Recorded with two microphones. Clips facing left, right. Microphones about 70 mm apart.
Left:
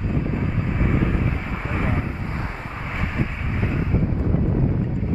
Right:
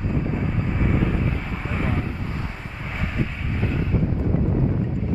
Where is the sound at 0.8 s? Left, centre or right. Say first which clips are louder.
Left 1 dB; centre.